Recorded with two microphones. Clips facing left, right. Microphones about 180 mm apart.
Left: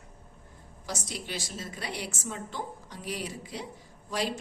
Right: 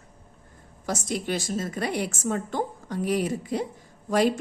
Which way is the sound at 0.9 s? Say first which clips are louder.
Right 9 dB; 50° right (ahead or behind).